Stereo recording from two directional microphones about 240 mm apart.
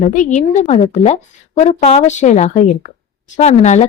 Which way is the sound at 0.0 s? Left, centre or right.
Left.